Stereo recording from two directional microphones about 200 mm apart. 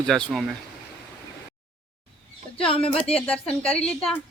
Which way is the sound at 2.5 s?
25° left (ahead or behind).